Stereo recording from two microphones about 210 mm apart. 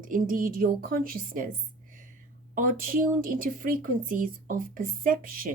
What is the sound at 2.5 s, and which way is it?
A woman's voice, 40° right (ahead or behind).